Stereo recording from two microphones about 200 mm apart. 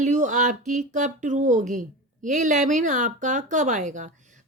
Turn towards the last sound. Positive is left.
turn(degrees=-40)  # may be behind; listen again after turning